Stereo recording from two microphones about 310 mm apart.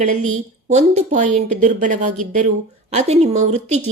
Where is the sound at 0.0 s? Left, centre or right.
Right.